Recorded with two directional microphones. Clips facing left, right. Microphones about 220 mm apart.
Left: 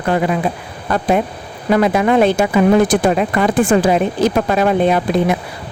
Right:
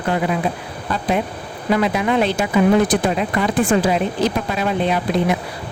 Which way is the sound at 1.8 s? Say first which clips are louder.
Left 6 dB; 50° left (ahead or behind).